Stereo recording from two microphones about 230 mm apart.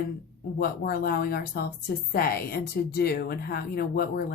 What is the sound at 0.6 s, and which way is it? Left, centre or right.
A woman's voice, left.